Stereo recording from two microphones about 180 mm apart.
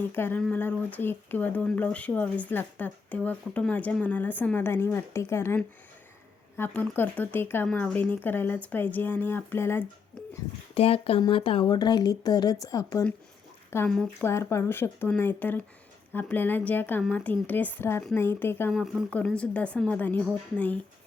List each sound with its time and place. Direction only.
0.0 s speech: 10° left (ahead or behind)
10.8 s speech: 30° left (ahead or behind); by 18.7 s 10° left (ahead or behind)
18.7 s speech: centre (ahead or behind)